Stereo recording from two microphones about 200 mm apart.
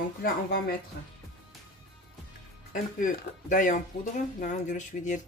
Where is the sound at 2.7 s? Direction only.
45° left (ahead or behind).